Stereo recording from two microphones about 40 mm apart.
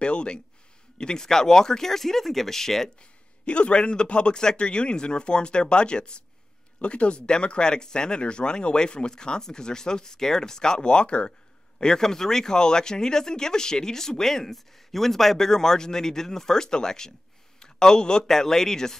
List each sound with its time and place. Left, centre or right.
0.0 s speech: left
3.0 s speech: left
17.6 s a sound: centre
18.2 s speech: centre